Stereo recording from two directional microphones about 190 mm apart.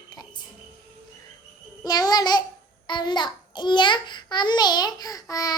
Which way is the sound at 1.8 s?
20° left (ahead or behind).